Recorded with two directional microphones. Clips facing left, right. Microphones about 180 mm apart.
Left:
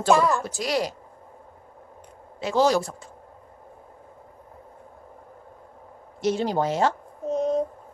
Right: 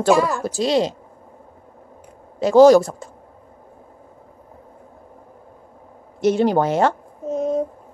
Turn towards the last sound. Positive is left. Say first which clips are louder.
# right 2 dB
turn(degrees=-5)  # may be behind; listen again after turning